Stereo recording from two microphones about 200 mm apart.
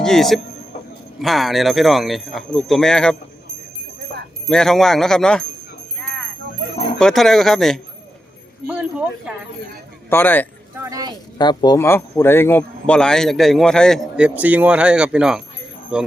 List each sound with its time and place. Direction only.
0.0 s a man's voice: centre (ahead or behind)
4.4 s a man's voice: 5° left (ahead or behind)
6.0 s a sound: 5° left (ahead or behind)
7.0 s a man's voice: centre (ahead or behind)
10.1 s speech: 10° left (ahead or behind)
10.8 s a sound: 15° right (ahead or behind)
11.3 s a man's voice: 20° left (ahead or behind); by 16.1 s 5° right (ahead or behind)